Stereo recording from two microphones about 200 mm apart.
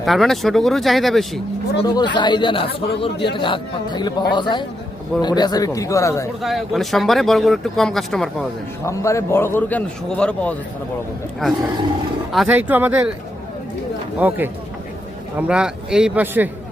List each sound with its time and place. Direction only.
0.0 s speech: centre (ahead or behind)
1.8 s a man's voice: 20° left (ahead or behind)
6.4 s speech: centre (ahead or behind)
8.8 s a man's voice: 15° left (ahead or behind)
12.3 s speech: 5° right (ahead or behind)
14.2 s speech: 10° right (ahead or behind)